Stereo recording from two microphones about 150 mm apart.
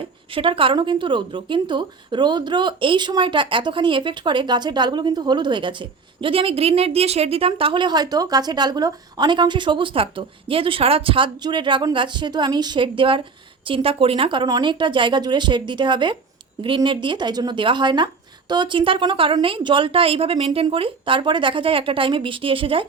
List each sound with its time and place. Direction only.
0.3 s a woman's voice: 35° right (ahead or behind)